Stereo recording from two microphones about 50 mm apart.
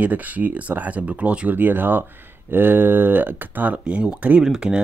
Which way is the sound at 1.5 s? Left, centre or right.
Right.